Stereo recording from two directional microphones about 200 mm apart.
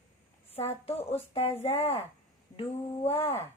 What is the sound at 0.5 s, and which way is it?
Speech, 30° left (ahead or behind).